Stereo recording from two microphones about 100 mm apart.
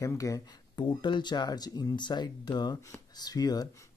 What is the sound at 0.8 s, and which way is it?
Speech, 50° left (ahead or behind).